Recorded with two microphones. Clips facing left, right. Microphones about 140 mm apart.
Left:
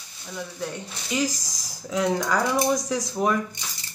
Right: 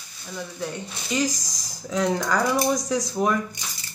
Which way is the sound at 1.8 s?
5° left (ahead or behind).